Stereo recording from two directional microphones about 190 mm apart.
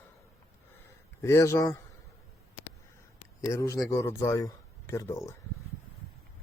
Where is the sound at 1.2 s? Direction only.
15° left (ahead or behind).